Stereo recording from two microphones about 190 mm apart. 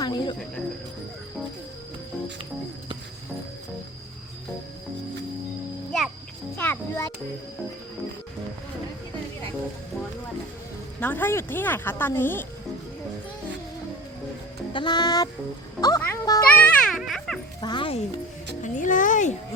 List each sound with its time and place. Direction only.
0.0 s cricket: 20° left (ahead or behind)
6.6 s a child's voice: 10° left (ahead or behind)
11.0 s a woman's voice: 10° left (ahead or behind)
14.7 s music: 25° left (ahead or behind)
15.8 s a sound: 15° left (ahead or behind)
16.5 s music: 10° left (ahead or behind)
17.6 s music: 25° left (ahead or behind)
18.6 s music: 40° left (ahead or behind)